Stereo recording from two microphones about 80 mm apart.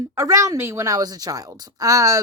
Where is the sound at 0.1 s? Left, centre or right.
Right.